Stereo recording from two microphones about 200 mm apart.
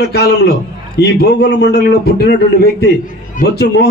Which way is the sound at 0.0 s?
55° left (ahead or behind).